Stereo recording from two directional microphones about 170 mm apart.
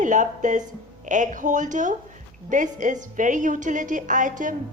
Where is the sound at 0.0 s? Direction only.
45° right (ahead or behind).